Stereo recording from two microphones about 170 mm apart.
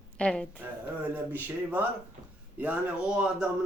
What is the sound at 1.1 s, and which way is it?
A man's voice, 10° right (ahead or behind).